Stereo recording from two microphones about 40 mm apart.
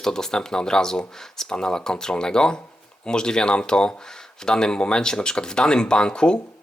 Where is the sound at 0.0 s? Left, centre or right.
Centre.